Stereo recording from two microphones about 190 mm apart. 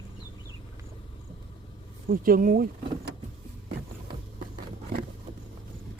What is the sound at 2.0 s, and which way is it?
Speech, 50° right (ahead or behind).